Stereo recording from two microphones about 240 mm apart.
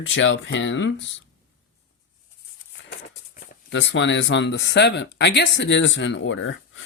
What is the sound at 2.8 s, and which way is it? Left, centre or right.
Speech, left.